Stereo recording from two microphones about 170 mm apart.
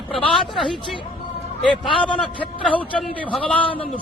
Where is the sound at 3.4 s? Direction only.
10° left (ahead or behind).